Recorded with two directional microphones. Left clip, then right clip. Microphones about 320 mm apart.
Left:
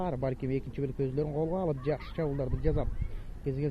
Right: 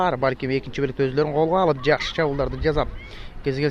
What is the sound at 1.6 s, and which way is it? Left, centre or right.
Speech, centre.